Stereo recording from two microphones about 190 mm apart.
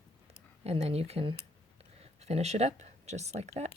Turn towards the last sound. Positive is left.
turn(degrees=-35)  # may be behind; listen again after turning